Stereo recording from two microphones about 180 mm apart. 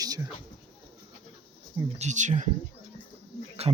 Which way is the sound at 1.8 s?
40° right (ahead or behind).